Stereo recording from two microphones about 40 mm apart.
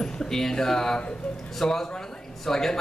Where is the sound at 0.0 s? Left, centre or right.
Centre.